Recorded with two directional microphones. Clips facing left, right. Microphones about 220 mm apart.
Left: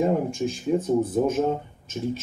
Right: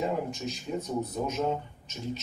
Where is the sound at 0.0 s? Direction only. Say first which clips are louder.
Left 8 dB; 50° left (ahead or behind).